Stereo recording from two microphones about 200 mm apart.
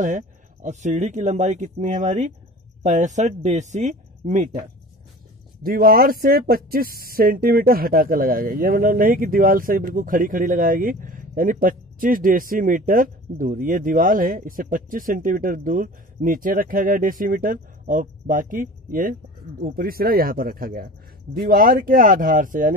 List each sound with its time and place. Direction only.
0.0 s speech: 40° right (ahead or behind)